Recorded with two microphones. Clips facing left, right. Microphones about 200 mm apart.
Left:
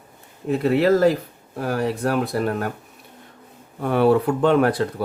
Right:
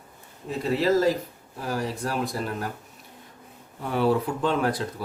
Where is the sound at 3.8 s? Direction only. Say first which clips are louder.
Left 6 dB; 60° left (ahead or behind).